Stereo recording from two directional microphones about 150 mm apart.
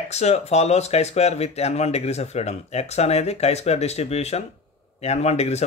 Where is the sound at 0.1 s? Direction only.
45° left (ahead or behind).